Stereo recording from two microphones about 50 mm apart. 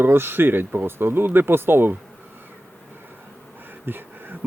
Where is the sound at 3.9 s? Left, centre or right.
Right.